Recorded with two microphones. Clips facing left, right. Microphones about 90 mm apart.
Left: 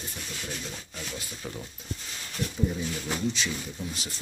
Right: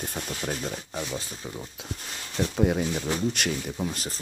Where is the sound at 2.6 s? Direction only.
65° right (ahead or behind).